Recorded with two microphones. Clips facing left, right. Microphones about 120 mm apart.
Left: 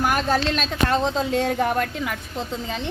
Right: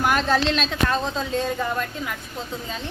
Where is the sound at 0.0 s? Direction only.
10° left (ahead or behind).